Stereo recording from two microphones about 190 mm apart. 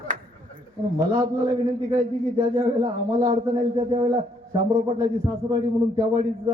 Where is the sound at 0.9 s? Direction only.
15° right (ahead or behind).